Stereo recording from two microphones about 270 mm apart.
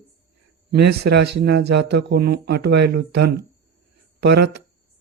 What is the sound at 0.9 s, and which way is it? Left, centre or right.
Speech, right.